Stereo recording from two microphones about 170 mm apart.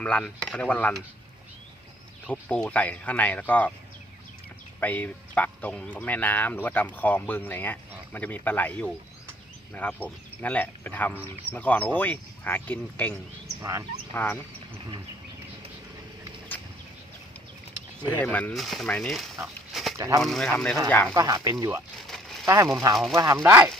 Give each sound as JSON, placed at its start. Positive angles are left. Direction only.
{"t": 0.0, "sound": "speech", "side_deg": 5}
{"t": 2.2, "sound": "speech", "side_deg": 5}
{"t": 4.8, "sound": "speech", "side_deg": 10}
{"t": 13.6, "sound": "speech", "side_deg": -20}
{"t": 14.1, "sound": "speech", "side_deg": 10}
{"t": 18.1, "sound": "speech", "side_deg": 10}
{"t": 20.0, "sound": "speech", "side_deg": -20}
{"t": 20.2, "sound": "speech", "side_deg": 0}
{"t": 21.1, "sound": "speech", "side_deg": -20}
{"t": 21.9, "sound": "a sound", "side_deg": 0}
{"t": 22.4, "sound": "speech", "side_deg": -20}